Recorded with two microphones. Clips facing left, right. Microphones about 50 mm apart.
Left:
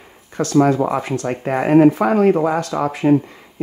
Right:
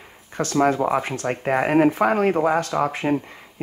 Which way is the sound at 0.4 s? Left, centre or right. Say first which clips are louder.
Left 4 dB; right.